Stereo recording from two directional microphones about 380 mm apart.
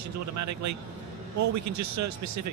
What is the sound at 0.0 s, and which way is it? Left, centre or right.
A man's voice, right.